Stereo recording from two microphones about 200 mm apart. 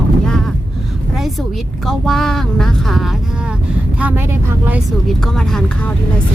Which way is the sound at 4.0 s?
10° right (ahead or behind).